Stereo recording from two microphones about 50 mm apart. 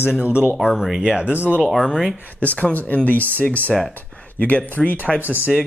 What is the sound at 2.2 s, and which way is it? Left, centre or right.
Speech, left.